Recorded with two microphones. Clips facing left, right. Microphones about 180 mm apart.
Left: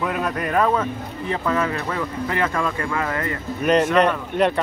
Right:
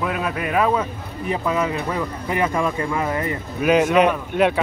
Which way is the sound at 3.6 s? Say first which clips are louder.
Right 1 dB; 5° right (ahead or behind).